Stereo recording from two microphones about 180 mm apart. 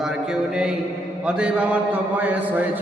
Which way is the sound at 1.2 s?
5° right (ahead or behind).